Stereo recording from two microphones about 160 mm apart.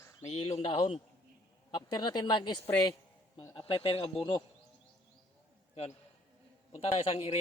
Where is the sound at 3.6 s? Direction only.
35° left (ahead or behind).